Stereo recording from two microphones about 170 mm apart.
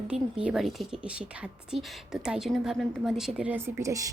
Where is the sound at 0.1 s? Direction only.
5° right (ahead or behind).